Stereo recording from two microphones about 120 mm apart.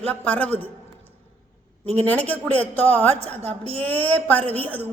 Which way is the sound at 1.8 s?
60° right (ahead or behind).